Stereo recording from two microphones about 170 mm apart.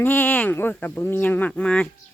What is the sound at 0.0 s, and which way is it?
Speech, 10° left (ahead or behind).